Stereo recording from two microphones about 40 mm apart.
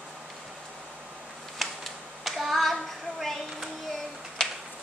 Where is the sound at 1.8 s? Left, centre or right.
Centre.